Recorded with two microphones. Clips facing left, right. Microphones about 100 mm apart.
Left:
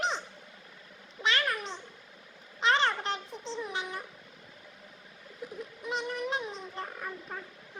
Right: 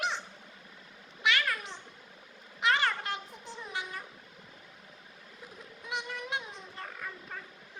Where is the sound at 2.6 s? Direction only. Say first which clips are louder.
Left 2 dB; 25° left (ahead or behind).